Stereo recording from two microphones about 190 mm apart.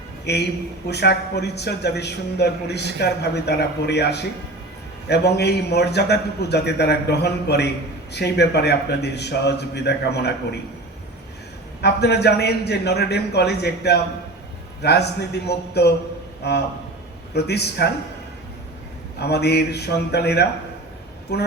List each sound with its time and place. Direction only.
0.3 s a man's voice: 60° left (ahead or behind)
11.8 s a man's voice: 60° left (ahead or behind)
19.2 s a man's voice: 60° left (ahead or behind)